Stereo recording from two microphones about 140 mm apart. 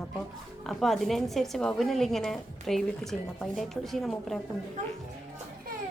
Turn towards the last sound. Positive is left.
turn(degrees=5)  # may be behind; listen again after turning